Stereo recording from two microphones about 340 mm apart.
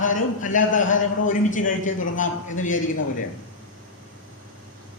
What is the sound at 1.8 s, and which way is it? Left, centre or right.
A man's voice, left.